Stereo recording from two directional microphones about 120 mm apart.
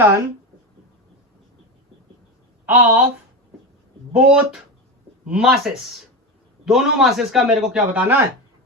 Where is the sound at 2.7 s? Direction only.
10° right (ahead or behind).